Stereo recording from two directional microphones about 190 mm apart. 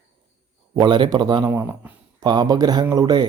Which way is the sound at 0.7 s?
25° right (ahead or behind).